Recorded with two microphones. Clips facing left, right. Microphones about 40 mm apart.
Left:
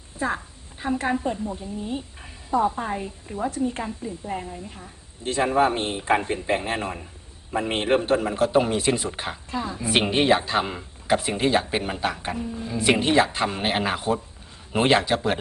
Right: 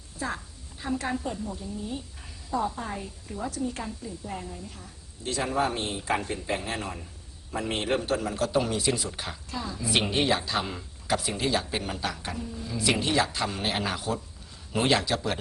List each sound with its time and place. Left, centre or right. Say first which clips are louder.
0.2 s a woman's voice: left 6 dB; left